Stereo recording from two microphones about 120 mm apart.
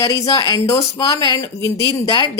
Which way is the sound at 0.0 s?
30° left (ahead or behind).